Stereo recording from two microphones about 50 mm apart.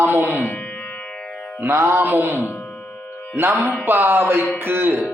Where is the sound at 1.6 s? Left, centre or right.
Right.